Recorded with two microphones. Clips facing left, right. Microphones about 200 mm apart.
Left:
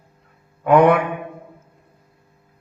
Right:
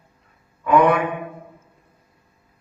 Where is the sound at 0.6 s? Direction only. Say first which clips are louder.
Left 3 dB; 55° left (ahead or behind).